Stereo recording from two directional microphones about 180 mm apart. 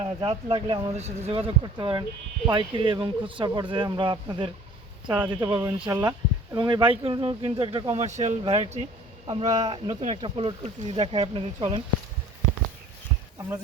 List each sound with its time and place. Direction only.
0.0 s speech: 30° right (ahead or behind)
8.0 s speech: 40° right (ahead or behind)